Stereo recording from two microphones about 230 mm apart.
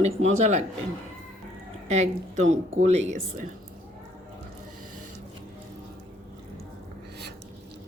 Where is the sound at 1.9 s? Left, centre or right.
Right.